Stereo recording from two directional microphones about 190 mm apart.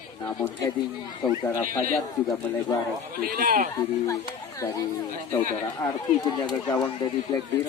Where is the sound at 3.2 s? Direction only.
50° right (ahead or behind).